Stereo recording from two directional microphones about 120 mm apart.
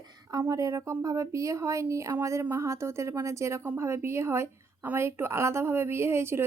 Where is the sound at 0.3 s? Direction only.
25° right (ahead or behind).